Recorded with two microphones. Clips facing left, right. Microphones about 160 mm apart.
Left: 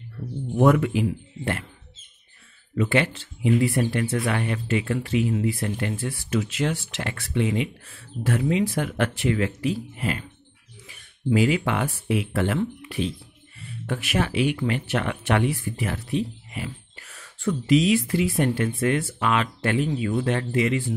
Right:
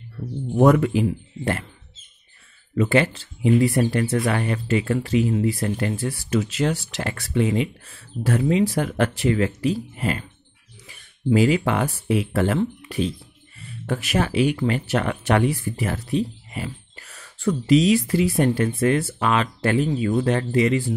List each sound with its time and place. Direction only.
0.6 s speech: 35° right (ahead or behind)
2.7 s speech: 40° right (ahead or behind)
11.2 s speech: 35° right (ahead or behind)